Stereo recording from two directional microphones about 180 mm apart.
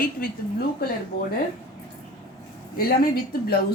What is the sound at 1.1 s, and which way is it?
Speech, 55° left (ahead or behind).